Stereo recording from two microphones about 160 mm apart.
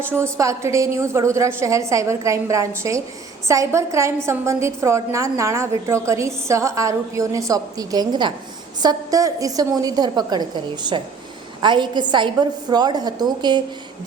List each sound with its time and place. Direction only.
0.1 s a woman's voice: 20° right (ahead or behind)